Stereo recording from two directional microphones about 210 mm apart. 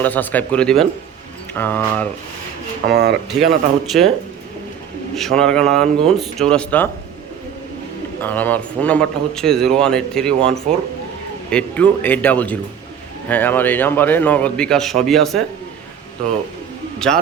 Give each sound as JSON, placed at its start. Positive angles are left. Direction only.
{"t": 0.0, "sound": "a man's voice", "side_deg": 10}
{"t": 2.8, "sound": "speech", "side_deg": -50}
{"t": 3.2, "sound": "a man's voice", "side_deg": 0}
{"t": 5.1, "sound": "a man's voice", "side_deg": 0}
{"t": 8.2, "sound": "a man's voice", "side_deg": 10}